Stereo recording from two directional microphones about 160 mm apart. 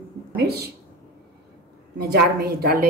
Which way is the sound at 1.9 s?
75° right (ahead or behind).